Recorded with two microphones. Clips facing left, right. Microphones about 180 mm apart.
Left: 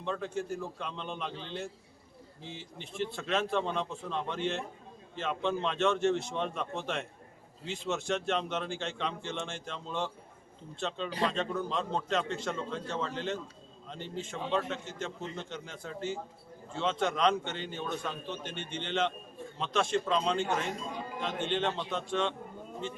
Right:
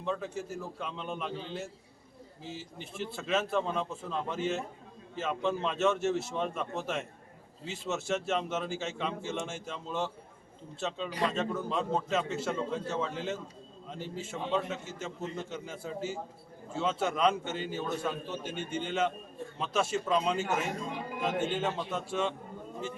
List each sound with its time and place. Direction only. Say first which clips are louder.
0.0 s a man's voice: even; 5° right (ahead or behind)